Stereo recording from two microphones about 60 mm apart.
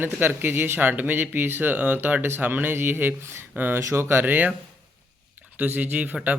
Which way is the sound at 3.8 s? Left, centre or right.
Right.